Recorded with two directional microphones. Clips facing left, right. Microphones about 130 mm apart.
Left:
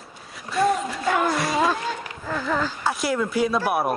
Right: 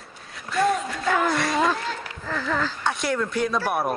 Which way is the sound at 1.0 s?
25° left (ahead or behind).